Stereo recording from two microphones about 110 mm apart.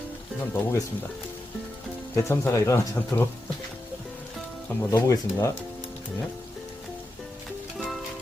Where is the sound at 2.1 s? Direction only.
25° left (ahead or behind).